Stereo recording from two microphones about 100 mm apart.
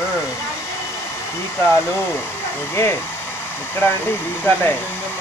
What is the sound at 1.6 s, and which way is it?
Speech, 25° left (ahead or behind).